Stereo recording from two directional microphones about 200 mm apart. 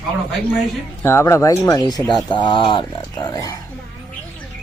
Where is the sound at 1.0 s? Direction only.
15° left (ahead or behind).